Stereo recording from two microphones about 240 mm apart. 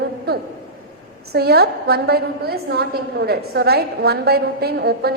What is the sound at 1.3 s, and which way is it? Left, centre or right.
A woman's voice, right.